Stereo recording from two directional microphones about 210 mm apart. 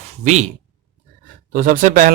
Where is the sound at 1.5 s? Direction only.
40° right (ahead or behind).